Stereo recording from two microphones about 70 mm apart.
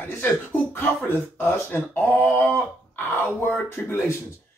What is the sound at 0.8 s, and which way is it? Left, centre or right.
Speech, left.